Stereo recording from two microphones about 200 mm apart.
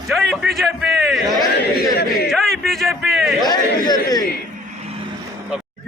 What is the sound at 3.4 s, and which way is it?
Speech, 20° left (ahead or behind).